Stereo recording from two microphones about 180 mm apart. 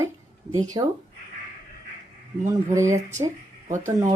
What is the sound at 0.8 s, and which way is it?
Speech, 20° right (ahead or behind).